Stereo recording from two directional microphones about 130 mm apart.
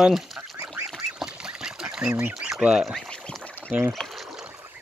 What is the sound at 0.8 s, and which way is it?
Duck, 5° right (ahead or behind).